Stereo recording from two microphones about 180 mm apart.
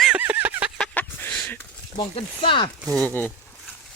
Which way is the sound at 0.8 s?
5° left (ahead or behind).